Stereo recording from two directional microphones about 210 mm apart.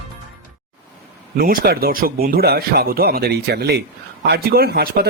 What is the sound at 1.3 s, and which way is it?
Speech, 45° right (ahead or behind).